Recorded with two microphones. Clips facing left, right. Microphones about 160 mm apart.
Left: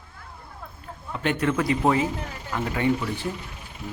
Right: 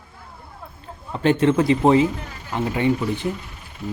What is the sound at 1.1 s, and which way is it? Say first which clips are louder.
Speech: right 7 dB; 30° right (ahead or behind).